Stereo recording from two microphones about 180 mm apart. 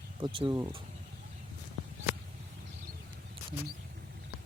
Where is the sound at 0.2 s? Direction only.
30° right (ahead or behind).